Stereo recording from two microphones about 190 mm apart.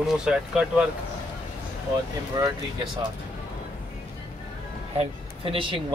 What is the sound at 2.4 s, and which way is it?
Speech, 20° right (ahead or behind).